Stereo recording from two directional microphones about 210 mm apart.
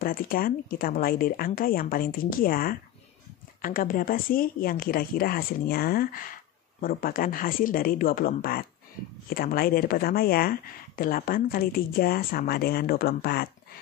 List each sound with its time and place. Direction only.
0.0 s speech: 45° left (ahead or behind)